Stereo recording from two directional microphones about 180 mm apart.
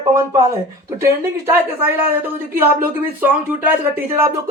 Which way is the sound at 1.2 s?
10° right (ahead or behind).